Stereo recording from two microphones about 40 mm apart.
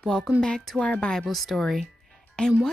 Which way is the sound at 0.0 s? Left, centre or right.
Centre.